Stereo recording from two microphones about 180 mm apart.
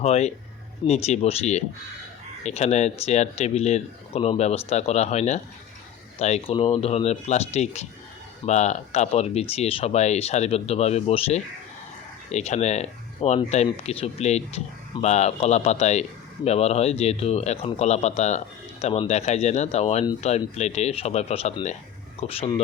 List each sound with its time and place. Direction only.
0.0 s speech: 35° left (ahead or behind)